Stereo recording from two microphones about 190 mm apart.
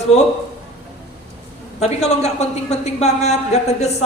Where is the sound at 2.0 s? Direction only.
35° left (ahead or behind).